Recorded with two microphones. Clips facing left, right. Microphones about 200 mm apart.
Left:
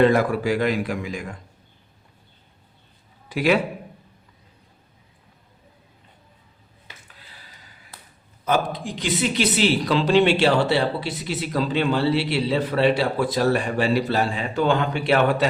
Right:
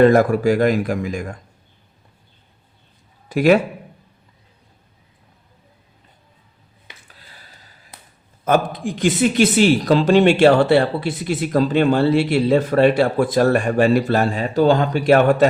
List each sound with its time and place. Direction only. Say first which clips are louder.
0.0 s speech: right 5 dB; 45° right (ahead or behind)
3.2 s a man's voice: right 6 dB; 45° right (ahead or behind)
7.1 s a sound: right 1 dB; 40° right (ahead or behind)
8.4 s speech: right 5 dB; 50° right (ahead or behind)